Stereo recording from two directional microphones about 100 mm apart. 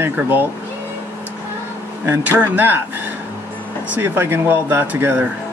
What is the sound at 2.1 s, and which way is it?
Speech, 20° right (ahead or behind).